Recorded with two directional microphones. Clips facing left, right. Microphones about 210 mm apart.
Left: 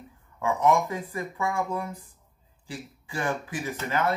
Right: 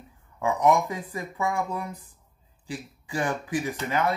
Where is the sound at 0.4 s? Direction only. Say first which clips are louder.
Right 1 dB; 15° right (ahead or behind).